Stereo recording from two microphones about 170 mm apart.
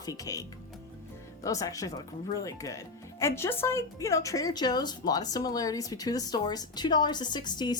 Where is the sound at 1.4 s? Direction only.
20° left (ahead or behind).